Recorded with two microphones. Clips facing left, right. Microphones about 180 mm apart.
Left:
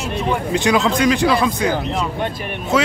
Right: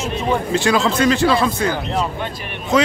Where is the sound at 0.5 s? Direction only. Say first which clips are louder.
Left 1 dB; 15° left (ahead or behind).